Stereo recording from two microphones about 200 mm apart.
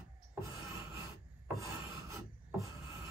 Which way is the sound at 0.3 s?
15° right (ahead or behind).